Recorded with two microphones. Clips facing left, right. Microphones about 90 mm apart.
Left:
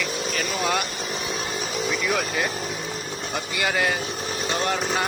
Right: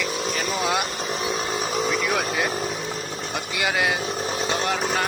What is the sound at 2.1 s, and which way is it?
Speech, 5° right (ahead or behind).